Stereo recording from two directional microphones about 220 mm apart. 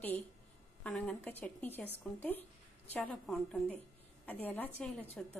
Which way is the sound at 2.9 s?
5° left (ahead or behind).